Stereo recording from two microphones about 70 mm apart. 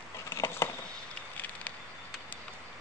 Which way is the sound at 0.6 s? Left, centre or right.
Left.